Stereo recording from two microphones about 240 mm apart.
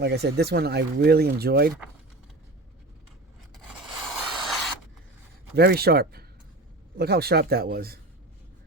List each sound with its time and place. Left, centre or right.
0.0 s speech: right
4.4 s rub: centre
5.5 s speech: right